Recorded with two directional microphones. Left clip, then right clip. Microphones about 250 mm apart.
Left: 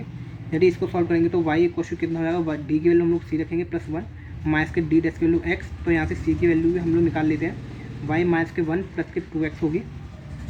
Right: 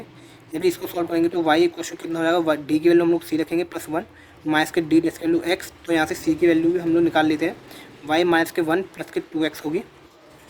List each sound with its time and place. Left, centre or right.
0.6 s speech: right